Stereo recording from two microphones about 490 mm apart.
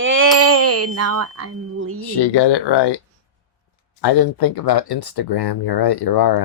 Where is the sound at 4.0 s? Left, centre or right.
Left.